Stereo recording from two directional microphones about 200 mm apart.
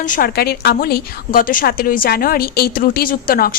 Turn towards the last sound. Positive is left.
turn(degrees=45)  # may be behind; listen again after turning